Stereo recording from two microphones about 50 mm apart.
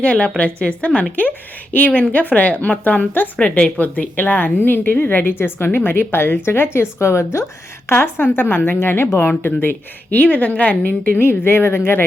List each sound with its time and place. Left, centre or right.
0.0 s a woman's voice: left
7.0 s a woman's voice: left
7.9 s a woman's voice: left
10.1 s a woman's voice: left
11.2 s a woman's voice: left